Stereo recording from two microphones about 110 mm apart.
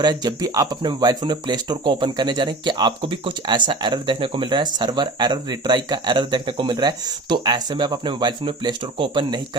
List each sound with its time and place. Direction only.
0.0 s speech: 40° right (ahead or behind)